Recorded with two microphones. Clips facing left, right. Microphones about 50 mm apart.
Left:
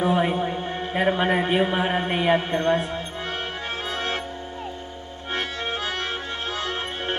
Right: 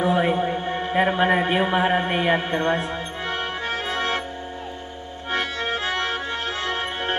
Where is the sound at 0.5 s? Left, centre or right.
Right.